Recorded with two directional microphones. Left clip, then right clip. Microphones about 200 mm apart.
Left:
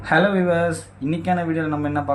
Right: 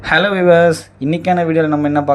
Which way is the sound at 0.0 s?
35° right (ahead or behind).